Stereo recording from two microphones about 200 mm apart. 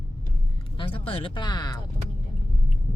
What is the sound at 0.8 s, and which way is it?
Speech, 25° left (ahead or behind).